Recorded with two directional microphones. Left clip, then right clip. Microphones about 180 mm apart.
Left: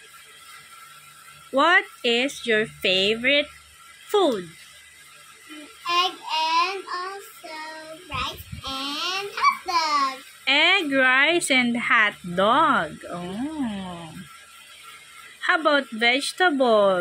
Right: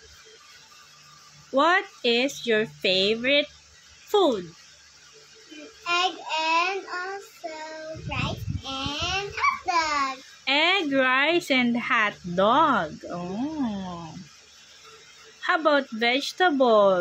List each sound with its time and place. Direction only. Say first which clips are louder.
1.5 s speech: left 3 dB; centre (ahead or behind)
5.9 s a child's voice: left 2 dB; 10° right (ahead or behind)
8.1 s a sound: left 3 dB; 5° right (ahead or behind)
15.4 s speech: left 2 dB; 5° right (ahead or behind)